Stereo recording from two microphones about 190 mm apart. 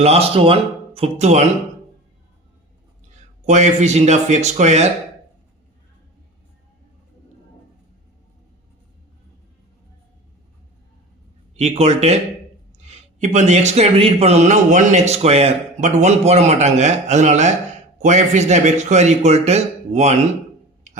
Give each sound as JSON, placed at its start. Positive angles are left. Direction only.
{"t": 0.0, "sound": "speech", "side_deg": -30}
{"t": 3.4, "sound": "speech", "side_deg": -40}
{"t": 11.5, "sound": "speech", "side_deg": -35}